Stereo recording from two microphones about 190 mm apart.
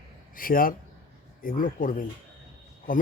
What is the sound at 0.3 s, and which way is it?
Speech, 50° left (ahead or behind).